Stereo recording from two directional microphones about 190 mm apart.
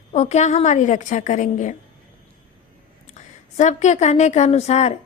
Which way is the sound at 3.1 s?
40° left (ahead or behind).